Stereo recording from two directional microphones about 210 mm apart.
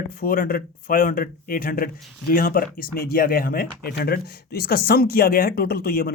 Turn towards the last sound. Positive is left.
turn(degrees=45)  # may be behind; listen again after turning